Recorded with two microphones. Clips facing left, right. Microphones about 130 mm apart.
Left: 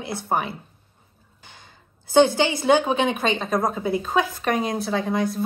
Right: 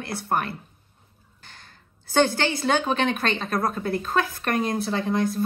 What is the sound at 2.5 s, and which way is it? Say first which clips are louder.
Speech: left 4 dB; 15° left (ahead or behind).